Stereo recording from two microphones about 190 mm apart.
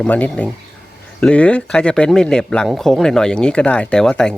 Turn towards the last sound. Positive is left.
turn(degrees=5)  # may be behind; listen again after turning